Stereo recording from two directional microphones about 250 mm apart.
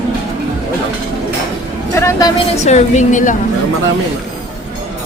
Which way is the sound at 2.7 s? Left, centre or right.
Left.